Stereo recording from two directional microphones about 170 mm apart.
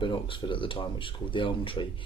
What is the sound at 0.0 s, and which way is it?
Speech, 30° left (ahead or behind).